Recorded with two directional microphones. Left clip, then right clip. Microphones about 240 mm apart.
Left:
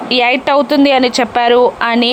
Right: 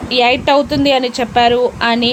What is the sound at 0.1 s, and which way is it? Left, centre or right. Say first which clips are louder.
A woman's voice: even; centre.